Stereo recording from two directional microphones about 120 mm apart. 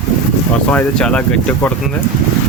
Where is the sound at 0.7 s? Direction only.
10° left (ahead or behind).